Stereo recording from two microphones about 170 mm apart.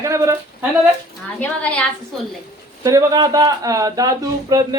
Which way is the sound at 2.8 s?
20° right (ahead or behind).